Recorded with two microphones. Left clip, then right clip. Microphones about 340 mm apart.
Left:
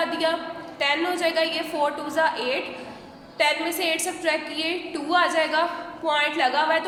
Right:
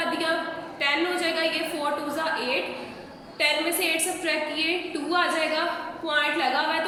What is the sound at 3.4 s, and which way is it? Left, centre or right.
A woman's voice, centre.